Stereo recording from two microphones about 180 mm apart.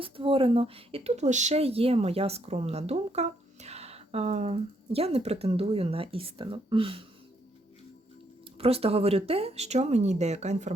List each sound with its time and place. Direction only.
0.0 s speech: 30° right (ahead or behind)
8.5 s speech: 35° right (ahead or behind)